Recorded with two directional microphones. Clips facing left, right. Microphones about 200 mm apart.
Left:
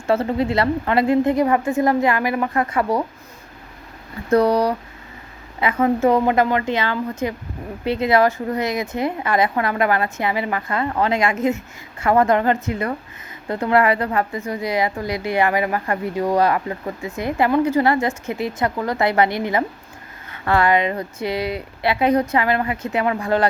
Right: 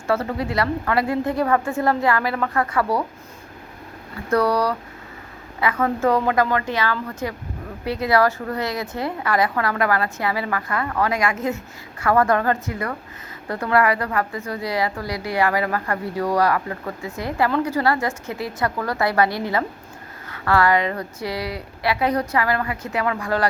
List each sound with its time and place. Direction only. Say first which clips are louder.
0.1 s a woman's voice: left 4 dB; 25° left (ahead or behind)
4.3 s a woman's voice: left 3 dB; 25° left (ahead or behind)